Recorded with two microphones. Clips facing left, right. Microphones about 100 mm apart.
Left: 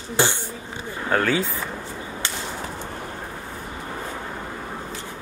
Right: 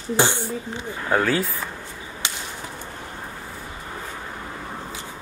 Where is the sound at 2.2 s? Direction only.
15° right (ahead or behind).